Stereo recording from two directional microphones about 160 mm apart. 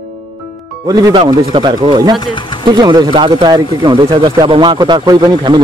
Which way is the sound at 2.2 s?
30° left (ahead or behind).